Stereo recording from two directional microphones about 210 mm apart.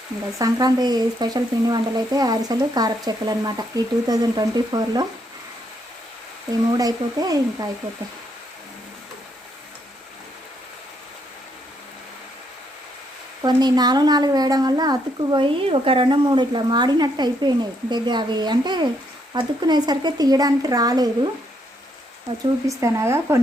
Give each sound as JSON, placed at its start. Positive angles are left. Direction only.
{"t": 0.3, "sound": "speech", "side_deg": -15}
{"t": 6.7, "sound": "speech", "side_deg": -20}
{"t": 13.4, "sound": "speech", "side_deg": -20}
{"t": 22.6, "sound": "speech", "side_deg": -15}